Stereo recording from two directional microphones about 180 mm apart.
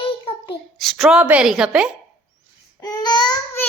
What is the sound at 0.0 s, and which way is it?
Child singing, 30° left (ahead or behind).